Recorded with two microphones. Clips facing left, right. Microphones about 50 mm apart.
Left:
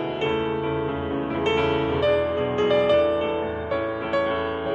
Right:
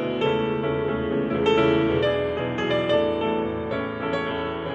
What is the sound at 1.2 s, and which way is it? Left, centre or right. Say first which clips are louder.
Music: right 3 dB; left.